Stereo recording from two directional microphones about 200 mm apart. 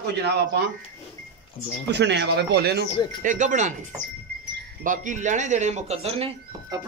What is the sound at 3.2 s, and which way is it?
Speech, 40° right (ahead or behind).